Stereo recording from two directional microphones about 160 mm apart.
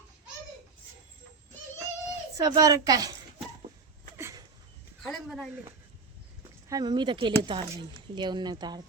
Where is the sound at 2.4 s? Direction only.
20° right (ahead or behind).